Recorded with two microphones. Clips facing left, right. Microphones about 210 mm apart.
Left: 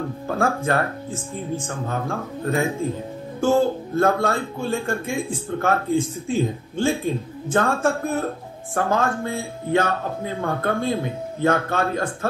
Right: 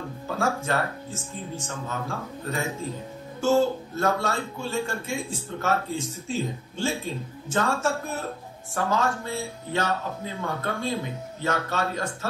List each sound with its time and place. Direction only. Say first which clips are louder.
0.3 s speech: left 4 dB; 55° left (ahead or behind)